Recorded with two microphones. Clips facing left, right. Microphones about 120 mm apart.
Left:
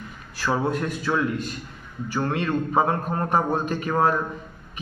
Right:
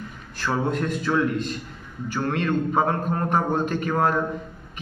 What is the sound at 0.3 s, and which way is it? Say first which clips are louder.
A man's voice: left 1 dB; 15° left (ahead or behind).